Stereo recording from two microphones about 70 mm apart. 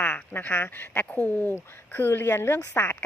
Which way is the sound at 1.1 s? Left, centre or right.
Centre.